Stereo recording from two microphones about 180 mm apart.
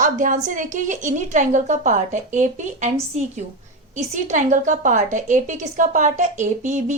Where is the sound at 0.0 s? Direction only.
45° right (ahead or behind).